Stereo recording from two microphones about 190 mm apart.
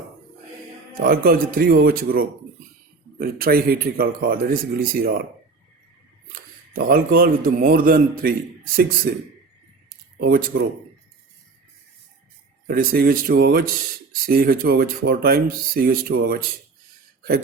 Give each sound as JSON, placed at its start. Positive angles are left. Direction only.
{"t": 0.9, "sound": "speech", "side_deg": -50}
{"t": 6.7, "sound": "speech", "side_deg": -50}
{"t": 10.2, "sound": "speech", "side_deg": -50}
{"t": 12.6, "sound": "speech", "side_deg": -50}